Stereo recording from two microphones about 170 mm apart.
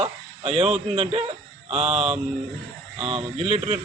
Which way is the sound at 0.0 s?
35° right (ahead or behind).